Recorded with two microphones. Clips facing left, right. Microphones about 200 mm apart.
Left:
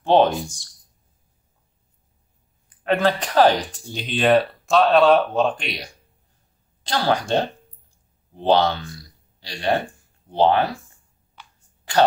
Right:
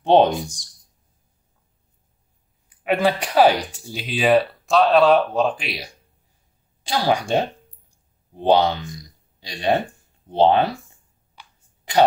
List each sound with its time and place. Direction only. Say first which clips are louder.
0.0 s speech: right 1 dB; 20° right (ahead or behind)
2.8 s speech: even; 10° right (ahead or behind)